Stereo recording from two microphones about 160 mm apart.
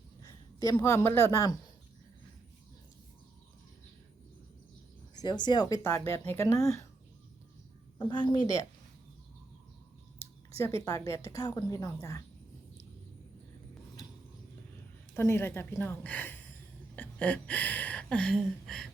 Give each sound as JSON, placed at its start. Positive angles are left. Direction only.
{"t": 0.2, "sound": "a woman's voice", "side_deg": 20}
{"t": 5.1, "sound": "speech", "side_deg": 25}
{"t": 7.9, "sound": "speech", "side_deg": 30}
{"t": 10.2, "sound": "a sound", "side_deg": 15}
{"t": 10.8, "sound": "speech", "side_deg": 20}
{"t": 15.1, "sound": "a woman's voice", "side_deg": 15}